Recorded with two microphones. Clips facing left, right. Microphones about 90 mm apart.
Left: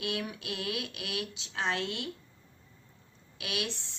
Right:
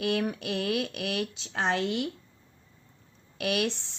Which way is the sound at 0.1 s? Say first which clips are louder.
Right 7 dB; 55° right (ahead or behind).